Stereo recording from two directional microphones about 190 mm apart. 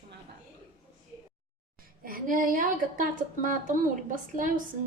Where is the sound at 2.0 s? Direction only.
45° right (ahead or behind).